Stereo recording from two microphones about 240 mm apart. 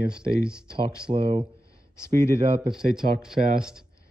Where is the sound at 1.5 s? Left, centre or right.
Centre.